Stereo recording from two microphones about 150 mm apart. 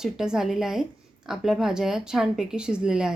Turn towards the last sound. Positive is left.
turn(degrees=-5)  # may be behind; listen again after turning